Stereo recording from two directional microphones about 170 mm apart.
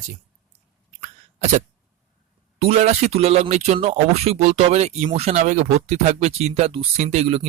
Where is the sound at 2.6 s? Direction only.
40° right (ahead or behind).